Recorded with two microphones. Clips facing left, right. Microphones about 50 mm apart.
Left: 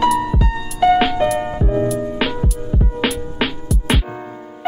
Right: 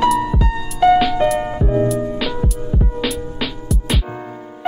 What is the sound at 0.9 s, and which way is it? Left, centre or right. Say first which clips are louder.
Music: right 1 dB; left.